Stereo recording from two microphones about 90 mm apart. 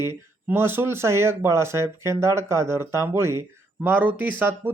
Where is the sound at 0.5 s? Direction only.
25° right (ahead or behind).